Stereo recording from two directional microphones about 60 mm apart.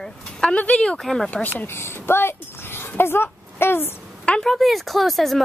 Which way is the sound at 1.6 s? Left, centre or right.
Left.